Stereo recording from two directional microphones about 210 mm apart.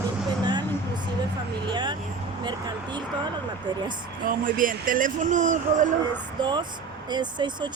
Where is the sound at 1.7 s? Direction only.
20° right (ahead or behind).